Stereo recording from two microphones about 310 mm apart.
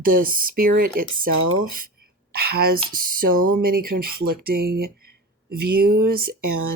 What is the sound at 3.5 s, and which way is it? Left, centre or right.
Speech, right.